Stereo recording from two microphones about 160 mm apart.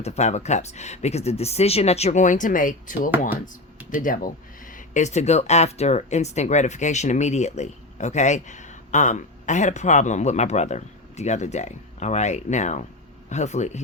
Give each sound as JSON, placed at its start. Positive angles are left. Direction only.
{"t": 0.0, "sound": "speech", "side_deg": 45}